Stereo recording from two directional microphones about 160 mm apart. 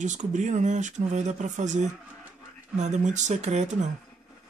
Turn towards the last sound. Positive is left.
turn(degrees=-45)  # may be behind; listen again after turning